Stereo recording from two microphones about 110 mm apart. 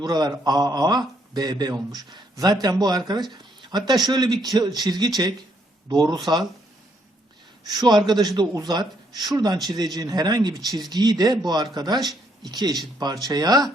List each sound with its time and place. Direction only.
0.0 s a man's voice: 35° right (ahead or behind)
7.6 s a man's voice: 40° right (ahead or behind)